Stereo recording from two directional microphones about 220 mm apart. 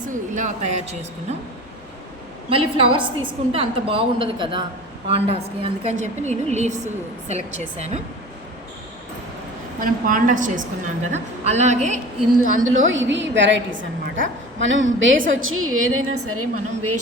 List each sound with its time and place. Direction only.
0.3 s speech: 30° right (ahead or behind)
2.5 s a woman's voice: 25° right (ahead or behind)
9.8 s speech: 40° right (ahead or behind)
12.4 s a woman's voice: 65° right (ahead or behind); by 17.0 s 85° right